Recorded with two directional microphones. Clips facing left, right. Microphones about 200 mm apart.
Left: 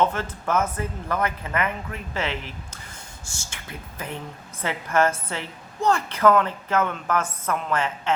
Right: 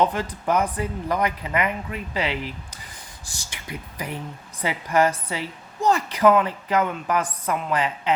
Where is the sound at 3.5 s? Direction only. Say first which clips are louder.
Right 4 dB; 15° right (ahead or behind).